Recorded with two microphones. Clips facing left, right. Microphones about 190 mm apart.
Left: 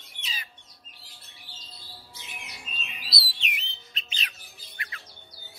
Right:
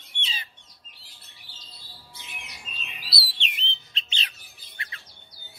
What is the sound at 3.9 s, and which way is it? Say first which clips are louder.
Chirp: right 1 dB; 30° right (ahead or behind).